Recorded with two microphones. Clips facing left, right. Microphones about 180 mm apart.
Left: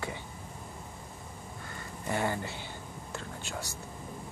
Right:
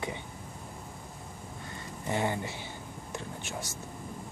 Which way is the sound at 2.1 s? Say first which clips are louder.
Right 1 dB; 20° right (ahead or behind).